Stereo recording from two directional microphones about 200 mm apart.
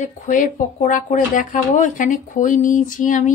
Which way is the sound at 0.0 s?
40° left (ahead or behind).